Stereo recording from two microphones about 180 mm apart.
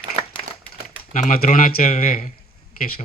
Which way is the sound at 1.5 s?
50° left (ahead or behind).